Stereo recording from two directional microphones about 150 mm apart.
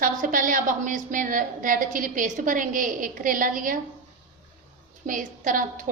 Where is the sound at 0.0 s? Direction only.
60° right (ahead or behind).